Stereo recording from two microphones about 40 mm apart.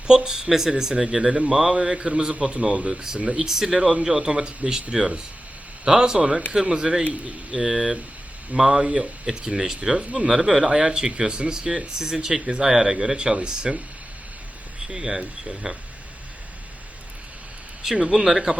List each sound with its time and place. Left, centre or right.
0.3 s speech: centre
2.9 s speech: centre
7.6 s speech: centre
10.0 s speech: right
10.2 s speech: centre
14.8 s speech: centre
18.0 s speech: centre